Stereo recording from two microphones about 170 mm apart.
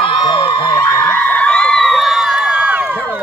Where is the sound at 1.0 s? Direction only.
10° left (ahead or behind); by 3.0 s 10° right (ahead or behind).